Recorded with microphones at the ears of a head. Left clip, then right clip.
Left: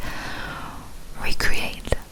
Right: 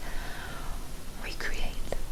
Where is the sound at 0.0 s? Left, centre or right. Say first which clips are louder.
Left 9 dB; left.